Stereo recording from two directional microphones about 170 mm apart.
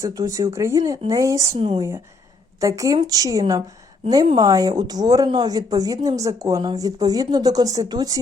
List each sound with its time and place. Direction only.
0.0 s speech: 20° right (ahead or behind)
1.5 s speech: 30° right (ahead or behind)
2.6 s speech: 20° right (ahead or behind)